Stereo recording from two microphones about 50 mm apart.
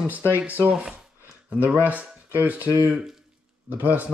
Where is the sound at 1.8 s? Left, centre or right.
Right.